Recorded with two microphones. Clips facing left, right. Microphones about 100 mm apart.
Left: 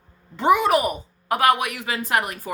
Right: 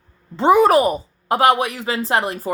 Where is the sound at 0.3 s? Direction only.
35° right (ahead or behind).